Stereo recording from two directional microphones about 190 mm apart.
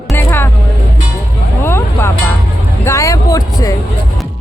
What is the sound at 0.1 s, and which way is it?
Music, 10° left (ahead or behind).